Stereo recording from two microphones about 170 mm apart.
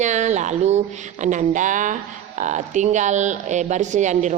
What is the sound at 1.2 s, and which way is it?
Speech, 45° right (ahead or behind).